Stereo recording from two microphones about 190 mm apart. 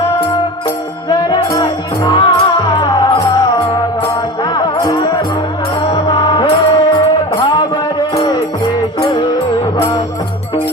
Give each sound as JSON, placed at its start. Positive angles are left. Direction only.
{"t": 1.3, "sound": "music", "side_deg": 25}
{"t": 7.4, "sound": "a sound", "side_deg": 25}
{"t": 8.1, "sound": "music", "side_deg": 20}